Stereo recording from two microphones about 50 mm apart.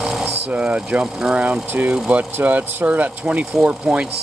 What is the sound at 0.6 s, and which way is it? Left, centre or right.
Speech, right.